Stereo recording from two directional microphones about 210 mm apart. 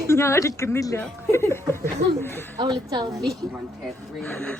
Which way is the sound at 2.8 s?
20° right (ahead or behind).